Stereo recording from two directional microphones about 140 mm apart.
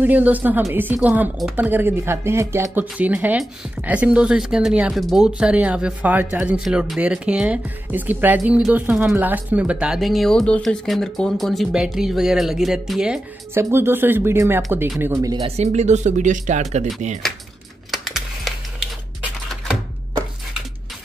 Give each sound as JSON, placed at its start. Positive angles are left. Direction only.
{"t": 0.0, "sound": "a woman's voice", "side_deg": -10}
{"t": 13.6, "sound": "a woman's voice", "side_deg": -15}
{"t": 15.4, "sound": "speech", "side_deg": -50}
{"t": 17.9, "sound": "typing", "side_deg": 0}